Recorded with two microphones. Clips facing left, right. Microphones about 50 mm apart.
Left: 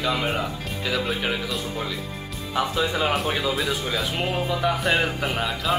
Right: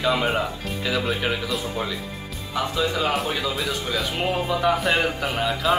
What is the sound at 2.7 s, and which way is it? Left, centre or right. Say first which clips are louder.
Speech: right 2 dB; centre.